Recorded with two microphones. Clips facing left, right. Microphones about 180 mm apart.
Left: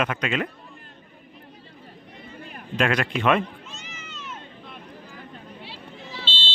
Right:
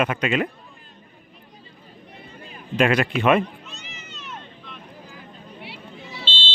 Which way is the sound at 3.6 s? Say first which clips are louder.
Even; 65° right (ahead or behind).